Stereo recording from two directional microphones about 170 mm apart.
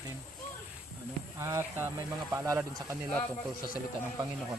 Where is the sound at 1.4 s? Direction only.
15° right (ahead or behind).